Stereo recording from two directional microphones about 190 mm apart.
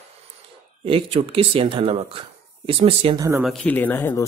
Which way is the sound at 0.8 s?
30° right (ahead or behind).